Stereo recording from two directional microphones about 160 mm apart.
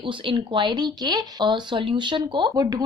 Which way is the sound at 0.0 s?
30° right (ahead or behind).